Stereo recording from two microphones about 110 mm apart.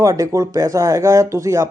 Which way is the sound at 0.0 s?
30° right (ahead or behind).